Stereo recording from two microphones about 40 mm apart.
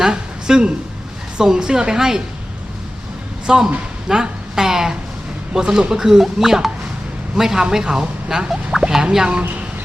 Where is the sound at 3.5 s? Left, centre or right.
Centre.